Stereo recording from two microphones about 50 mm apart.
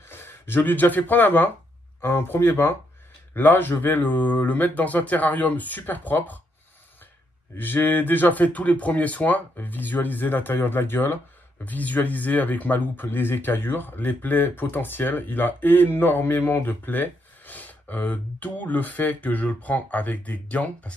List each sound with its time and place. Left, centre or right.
0.1 s speech: left
2.0 s speech: left
7.5 s speech: left
11.6 s speech: left